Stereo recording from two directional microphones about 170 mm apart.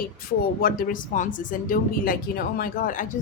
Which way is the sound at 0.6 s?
60° left (ahead or behind).